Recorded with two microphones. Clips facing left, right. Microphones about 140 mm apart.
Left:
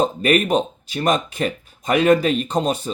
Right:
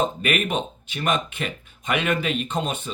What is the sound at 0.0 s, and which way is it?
Speech, 35° left (ahead or behind).